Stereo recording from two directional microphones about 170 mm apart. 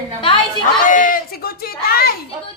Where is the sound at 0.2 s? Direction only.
30° left (ahead or behind).